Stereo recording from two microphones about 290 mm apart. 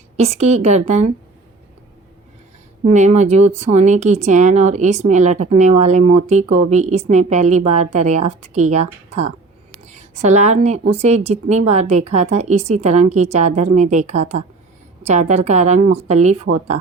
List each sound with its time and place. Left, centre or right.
0.2 s speech: right
2.8 s speech: right
9.8 s a sound: right
11.0 s speech: right